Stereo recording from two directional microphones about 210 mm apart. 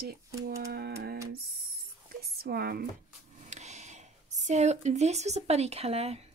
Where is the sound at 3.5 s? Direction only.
35° right (ahead or behind).